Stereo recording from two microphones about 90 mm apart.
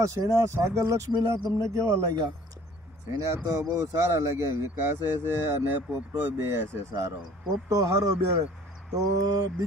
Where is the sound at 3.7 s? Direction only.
40° right (ahead or behind).